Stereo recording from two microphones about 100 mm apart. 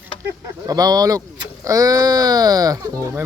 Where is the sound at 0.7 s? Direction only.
40° right (ahead or behind).